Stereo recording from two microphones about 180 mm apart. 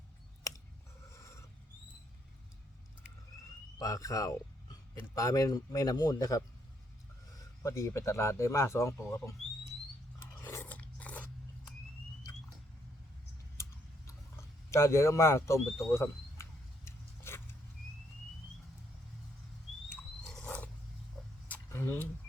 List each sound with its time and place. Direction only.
1.1 s filing: 15° left (ahead or behind)
3.8 s speech: 20° left (ahead or behind)
10.4 s biting: 10° left (ahead or behind)
14.7 s a sound: 15° left (ahead or behind)
20.4 s purr: 10° left (ahead or behind)
21.4 s a sound: 10° left (ahead or behind)